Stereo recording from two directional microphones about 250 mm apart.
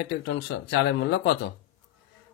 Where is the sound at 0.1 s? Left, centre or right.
Left.